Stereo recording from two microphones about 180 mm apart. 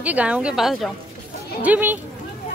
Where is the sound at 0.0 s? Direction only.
5° right (ahead or behind).